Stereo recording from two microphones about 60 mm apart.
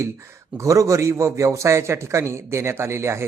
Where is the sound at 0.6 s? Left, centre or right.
Right.